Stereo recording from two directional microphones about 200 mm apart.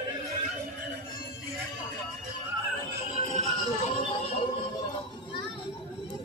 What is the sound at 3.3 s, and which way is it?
Music, 35° left (ahead or behind).